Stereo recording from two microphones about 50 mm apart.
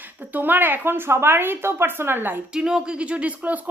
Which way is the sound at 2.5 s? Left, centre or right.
Centre.